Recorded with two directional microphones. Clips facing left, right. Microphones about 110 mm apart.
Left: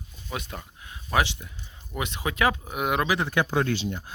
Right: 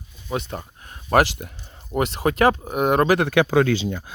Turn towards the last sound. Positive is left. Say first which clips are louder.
# right 7 dB
turn(degrees=-90)